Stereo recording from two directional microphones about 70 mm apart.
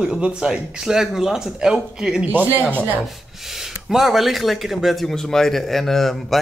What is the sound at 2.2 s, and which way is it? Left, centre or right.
Speech, right.